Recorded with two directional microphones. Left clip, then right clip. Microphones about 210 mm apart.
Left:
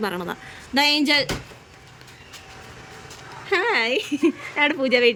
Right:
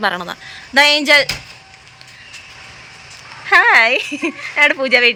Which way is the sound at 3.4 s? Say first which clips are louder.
Right 11 dB; 5° left (ahead or behind).